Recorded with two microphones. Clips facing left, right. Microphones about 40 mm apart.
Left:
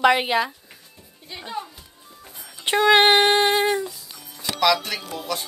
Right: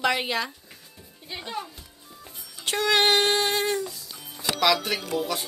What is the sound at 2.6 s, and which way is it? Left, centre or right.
Child singing, left.